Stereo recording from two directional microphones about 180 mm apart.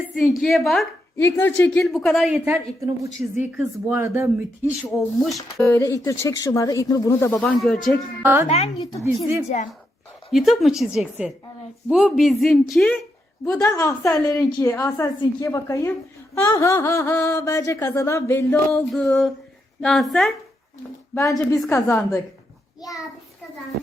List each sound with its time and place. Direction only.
0.2 s a woman's voice: centre (ahead or behind)
4.8 s a woman's voice: centre (ahead or behind)
5.7 s a woman's voice: 15° left (ahead or behind)
8.2 s speech: 15° right (ahead or behind)
8.4 s a woman's voice: 35° left (ahead or behind)
10.3 s a woman's voice: centre (ahead or behind)
13.5 s a woman's voice: 15° left (ahead or behind)
18.7 s a woman's voice: centre (ahead or behind)
21.2 s a woman's voice: 20° left (ahead or behind)